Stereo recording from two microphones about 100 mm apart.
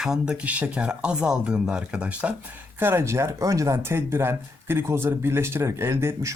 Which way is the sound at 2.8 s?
25° right (ahead or behind).